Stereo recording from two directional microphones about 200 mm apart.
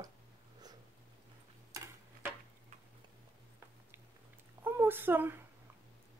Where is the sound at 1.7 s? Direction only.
15° right (ahead or behind).